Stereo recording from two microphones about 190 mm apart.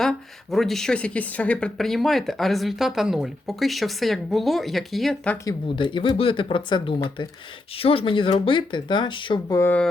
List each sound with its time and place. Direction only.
0.0 s speech: centre (ahead or behind)
5.5 s speech: 25° left (ahead or behind); by 9.9 s 10° left (ahead or behind)